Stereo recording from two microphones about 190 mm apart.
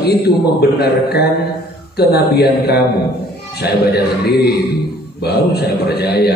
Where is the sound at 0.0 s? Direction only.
55° left (ahead or behind).